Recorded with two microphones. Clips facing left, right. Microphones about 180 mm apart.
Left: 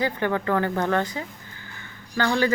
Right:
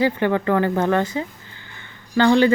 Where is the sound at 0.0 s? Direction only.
15° right (ahead or behind).